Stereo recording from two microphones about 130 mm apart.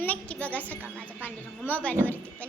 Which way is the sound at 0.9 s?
15° left (ahead or behind).